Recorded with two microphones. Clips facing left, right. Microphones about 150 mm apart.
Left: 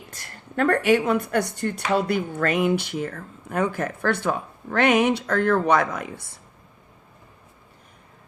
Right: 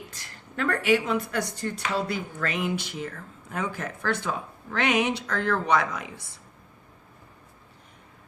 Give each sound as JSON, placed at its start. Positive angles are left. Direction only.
{"t": 0.2, "sound": "a woman's voice", "side_deg": 50}